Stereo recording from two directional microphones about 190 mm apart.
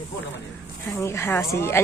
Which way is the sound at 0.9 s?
15° left (ahead or behind).